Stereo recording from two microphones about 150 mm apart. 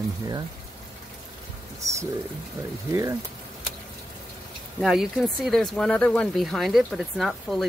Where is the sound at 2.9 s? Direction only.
20° right (ahead or behind).